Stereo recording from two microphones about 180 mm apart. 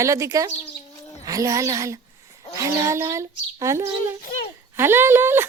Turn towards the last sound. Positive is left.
turn(degrees=-10)  # may be behind; listen again after turning